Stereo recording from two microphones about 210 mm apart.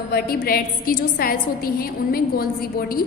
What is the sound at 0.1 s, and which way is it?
A woman's voice, 45° left (ahead or behind).